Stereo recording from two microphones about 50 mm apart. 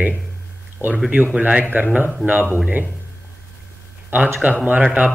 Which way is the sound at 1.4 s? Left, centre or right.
Right.